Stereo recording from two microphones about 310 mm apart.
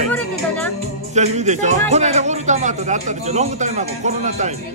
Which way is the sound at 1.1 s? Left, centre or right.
Right.